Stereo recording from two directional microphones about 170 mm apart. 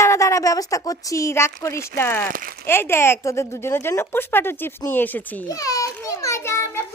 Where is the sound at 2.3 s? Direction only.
55° right (ahead or behind).